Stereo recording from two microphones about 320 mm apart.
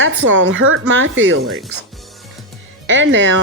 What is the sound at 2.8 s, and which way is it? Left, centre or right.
Speech, right.